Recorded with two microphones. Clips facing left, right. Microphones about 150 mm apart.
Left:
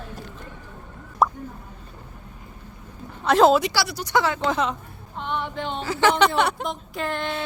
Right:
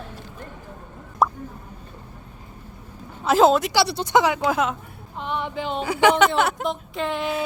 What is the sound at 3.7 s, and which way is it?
Speech, 25° right (ahead or behind).